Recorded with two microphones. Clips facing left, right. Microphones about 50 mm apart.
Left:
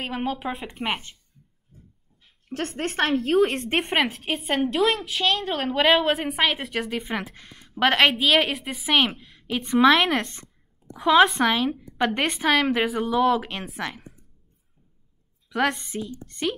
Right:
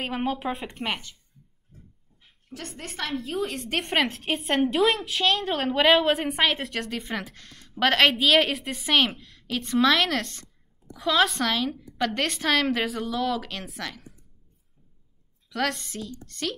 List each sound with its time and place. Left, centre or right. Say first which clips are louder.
0.0 s a woman's voice: even; centre
0.8 s a woman's voice: left 3 dB; left
2.5 s a woman's voice: left 10 dB; left
3.3 s a woman's voice: left 11 dB; left
3.8 s a woman's voice: right 1 dB; centre
4.1 s a woman's voice: even; centre; by 11.0 s left
11.0 s a woman's voice: left 6 dB; centre
13.0 s a woman's voice: left 6 dB; left
15.5 s a woman's voice: left 4 dB; centre